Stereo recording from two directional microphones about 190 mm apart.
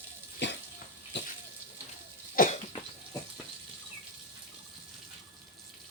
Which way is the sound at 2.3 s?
40° left (ahead or behind).